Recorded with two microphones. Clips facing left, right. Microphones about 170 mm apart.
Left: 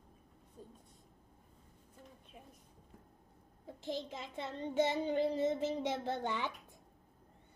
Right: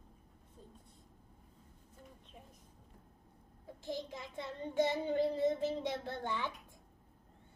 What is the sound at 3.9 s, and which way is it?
Child singing, 20° left (ahead or behind).